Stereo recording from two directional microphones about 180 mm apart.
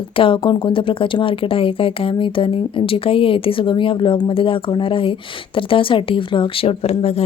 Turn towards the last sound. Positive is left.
turn(degrees=35)  # may be behind; listen again after turning